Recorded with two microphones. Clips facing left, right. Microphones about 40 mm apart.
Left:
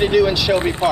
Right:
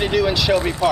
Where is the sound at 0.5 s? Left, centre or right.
Left.